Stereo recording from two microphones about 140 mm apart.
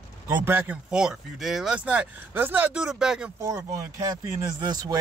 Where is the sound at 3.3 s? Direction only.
20° right (ahead or behind).